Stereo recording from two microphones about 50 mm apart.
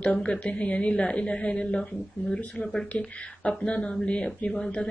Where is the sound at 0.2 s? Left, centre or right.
Left.